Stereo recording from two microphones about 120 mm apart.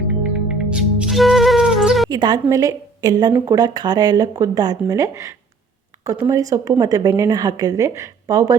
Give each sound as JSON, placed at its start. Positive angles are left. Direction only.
{"t": 0.2, "sound": "music", "side_deg": -10}
{"t": 2.0, "sound": "a woman's voice", "side_deg": -35}